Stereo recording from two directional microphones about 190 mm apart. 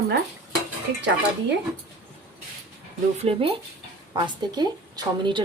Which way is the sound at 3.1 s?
30° right (ahead or behind).